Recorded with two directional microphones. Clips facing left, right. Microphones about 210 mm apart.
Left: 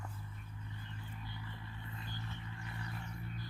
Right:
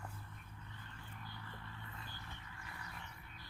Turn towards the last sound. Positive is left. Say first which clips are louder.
# left 6 dB
turn(degrees=30)  # may be behind; listen again after turning